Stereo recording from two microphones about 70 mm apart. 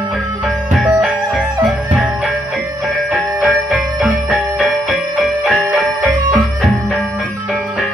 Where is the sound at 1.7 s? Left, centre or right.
Centre.